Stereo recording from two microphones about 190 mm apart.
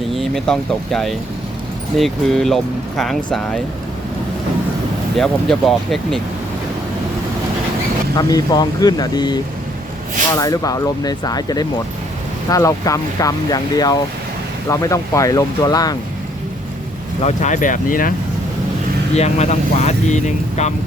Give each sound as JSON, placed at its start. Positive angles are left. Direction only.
{"t": 0.1, "sound": "speech", "side_deg": 0}
{"t": 5.1, "sound": "speech", "side_deg": 0}
{"t": 8.1, "sound": "speech", "side_deg": 20}
{"t": 17.2, "sound": "speech", "side_deg": 40}
{"t": 19.1, "sound": "speech", "side_deg": 35}